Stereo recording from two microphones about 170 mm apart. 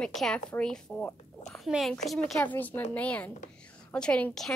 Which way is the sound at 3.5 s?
5° left (ahead or behind).